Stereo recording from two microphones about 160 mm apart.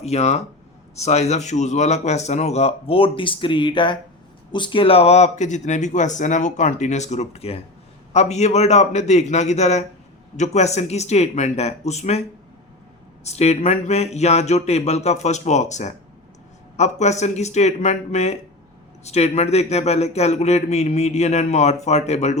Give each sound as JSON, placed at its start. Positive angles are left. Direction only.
{"t": 0.0, "sound": "a man's voice", "side_deg": 45}
{"t": 13.2, "sound": "a man's voice", "side_deg": 40}